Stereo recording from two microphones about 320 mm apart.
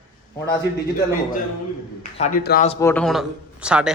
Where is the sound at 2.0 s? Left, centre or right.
Left.